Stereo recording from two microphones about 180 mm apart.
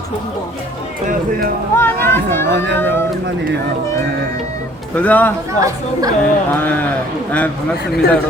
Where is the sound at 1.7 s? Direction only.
15° left (ahead or behind).